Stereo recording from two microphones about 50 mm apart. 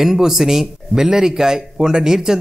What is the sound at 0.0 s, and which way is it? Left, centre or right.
Speech, centre.